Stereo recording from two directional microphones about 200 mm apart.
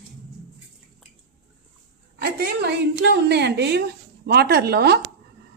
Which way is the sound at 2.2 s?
50° right (ahead or behind).